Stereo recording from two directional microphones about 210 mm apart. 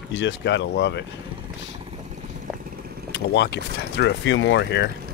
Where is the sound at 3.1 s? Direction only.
55° left (ahead or behind).